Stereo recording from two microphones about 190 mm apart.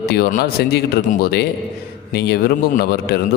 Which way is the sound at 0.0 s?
55° left (ahead or behind).